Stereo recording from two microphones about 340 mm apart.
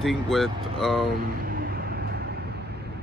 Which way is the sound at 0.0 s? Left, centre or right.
Centre.